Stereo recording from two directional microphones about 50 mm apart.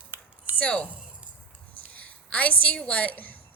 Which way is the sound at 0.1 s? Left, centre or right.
Right.